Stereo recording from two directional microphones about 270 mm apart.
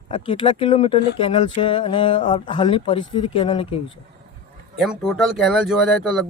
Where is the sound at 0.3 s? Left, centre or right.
Left.